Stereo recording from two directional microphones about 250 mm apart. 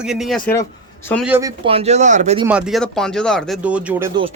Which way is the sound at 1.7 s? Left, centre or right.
Right.